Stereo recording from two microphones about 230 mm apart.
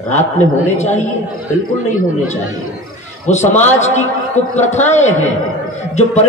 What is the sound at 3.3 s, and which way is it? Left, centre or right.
A woman's voice, left.